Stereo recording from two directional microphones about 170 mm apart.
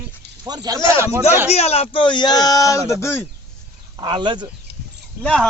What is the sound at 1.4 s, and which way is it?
Speech, 40° left (ahead or behind).